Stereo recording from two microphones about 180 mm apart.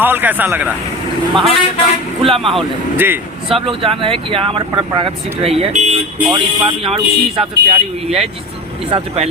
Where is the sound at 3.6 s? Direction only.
30° right (ahead or behind).